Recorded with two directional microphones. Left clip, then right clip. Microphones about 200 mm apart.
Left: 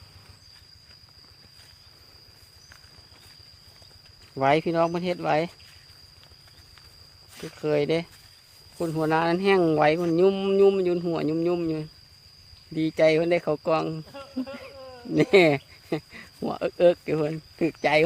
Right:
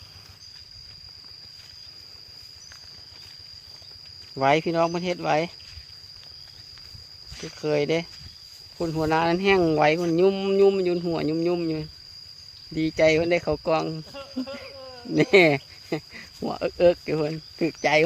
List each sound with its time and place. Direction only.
4.4 s speech: centre (ahead or behind)
7.3 s speech: centre (ahead or behind)